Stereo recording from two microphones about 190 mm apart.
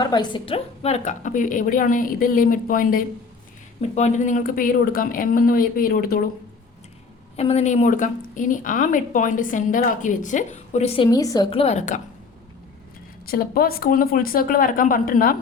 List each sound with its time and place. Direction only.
0.0 s a woman's voice: 20° left (ahead or behind); by 6.2 s 50° left (ahead or behind)
7.3 s a woman's voice: 35° left (ahead or behind); by 11.4 s 20° left (ahead or behind)
11.5 s a woman's voice: 35° left (ahead or behind)
13.2 s a woman's voice: 50° left (ahead or behind)